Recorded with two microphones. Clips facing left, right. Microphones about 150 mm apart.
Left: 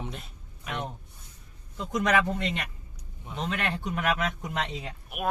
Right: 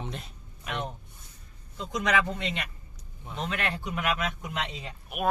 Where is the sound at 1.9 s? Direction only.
45° left (ahead or behind).